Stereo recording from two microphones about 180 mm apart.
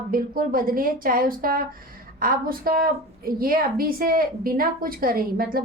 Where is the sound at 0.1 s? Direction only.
50° right (ahead or behind).